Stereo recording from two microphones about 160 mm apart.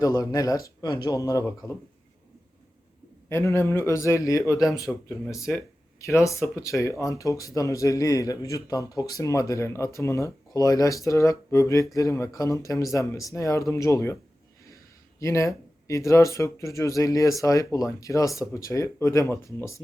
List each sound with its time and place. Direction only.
0.0 s speech: 20° left (ahead or behind)
3.2 s speech: 15° left (ahead or behind)
6.1 s speech: 20° left (ahead or behind)
15.2 s speech: 20° left (ahead or behind)